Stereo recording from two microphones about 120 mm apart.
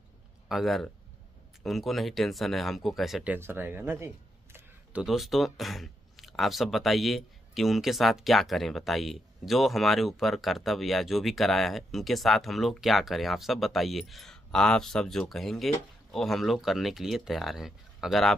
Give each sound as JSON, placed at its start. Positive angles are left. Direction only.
{"t": 0.5, "sound": "speech", "side_deg": 0}
{"t": 3.3, "sound": "speech", "side_deg": -20}
{"t": 5.0, "sound": "speech", "side_deg": 0}